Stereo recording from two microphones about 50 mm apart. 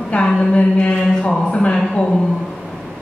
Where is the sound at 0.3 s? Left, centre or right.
Centre.